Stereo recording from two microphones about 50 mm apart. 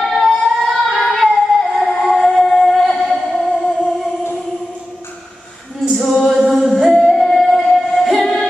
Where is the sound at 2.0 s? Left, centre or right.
Centre.